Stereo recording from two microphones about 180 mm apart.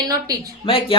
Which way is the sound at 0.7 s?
30° left (ahead or behind).